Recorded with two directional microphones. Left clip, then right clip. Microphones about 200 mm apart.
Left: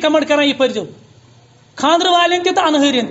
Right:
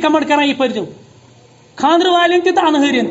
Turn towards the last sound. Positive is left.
turn(degrees=20)  # may be behind; listen again after turning